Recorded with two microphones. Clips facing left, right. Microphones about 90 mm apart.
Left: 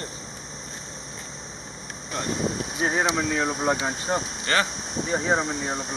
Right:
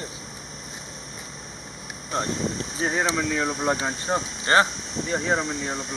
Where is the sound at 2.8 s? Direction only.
15° left (ahead or behind).